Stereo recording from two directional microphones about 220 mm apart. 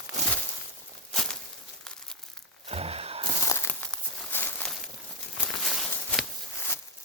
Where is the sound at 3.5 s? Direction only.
10° left (ahead or behind).